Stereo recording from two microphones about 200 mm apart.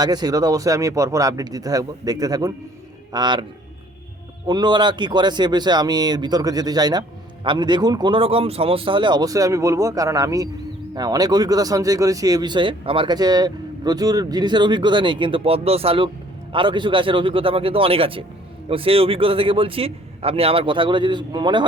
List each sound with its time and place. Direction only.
0.0 s speech: 20° right (ahead or behind)
4.4 s speech: 20° right (ahead or behind)